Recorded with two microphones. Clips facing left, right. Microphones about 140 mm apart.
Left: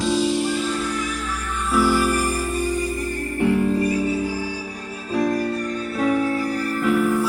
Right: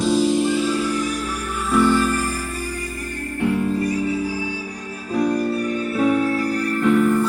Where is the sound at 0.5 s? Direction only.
5° right (ahead or behind); by 2.3 s 10° left (ahead or behind).